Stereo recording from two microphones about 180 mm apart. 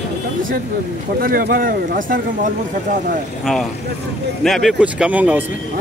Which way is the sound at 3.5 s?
Centre (ahead or behind).